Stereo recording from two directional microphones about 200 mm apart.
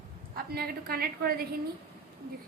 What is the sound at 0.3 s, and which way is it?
A woman's voice, 50° right (ahead or behind).